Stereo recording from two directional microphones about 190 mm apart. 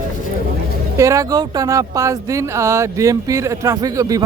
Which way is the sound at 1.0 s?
15° right (ahead or behind).